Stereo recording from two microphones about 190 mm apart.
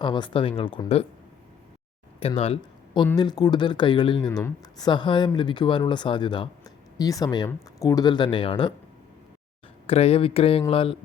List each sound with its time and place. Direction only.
0.0 s speech: 25° left (ahead or behind)
2.2 s speech: 30° left (ahead or behind)
9.8 s speech: 30° left (ahead or behind)